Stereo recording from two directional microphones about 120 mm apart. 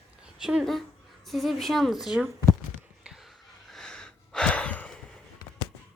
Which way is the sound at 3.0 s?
Centre (ahead or behind).